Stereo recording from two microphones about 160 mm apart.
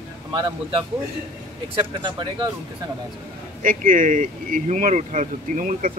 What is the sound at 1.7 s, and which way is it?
Speech, 30° right (ahead or behind).